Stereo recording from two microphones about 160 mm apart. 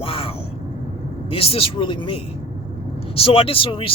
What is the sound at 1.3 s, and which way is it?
Speech, 35° left (ahead or behind).